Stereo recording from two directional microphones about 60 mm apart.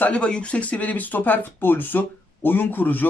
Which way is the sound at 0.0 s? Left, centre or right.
Centre.